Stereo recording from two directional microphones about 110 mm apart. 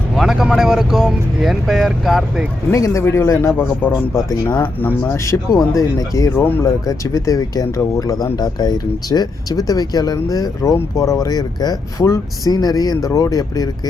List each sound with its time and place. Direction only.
0.2 s speech: 5° right (ahead or behind)
2.7 s speech: 30° left (ahead or behind)